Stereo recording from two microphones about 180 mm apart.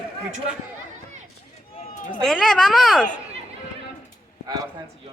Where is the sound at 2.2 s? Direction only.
Centre (ahead or behind).